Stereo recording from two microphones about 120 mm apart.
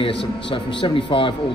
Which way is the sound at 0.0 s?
45° left (ahead or behind).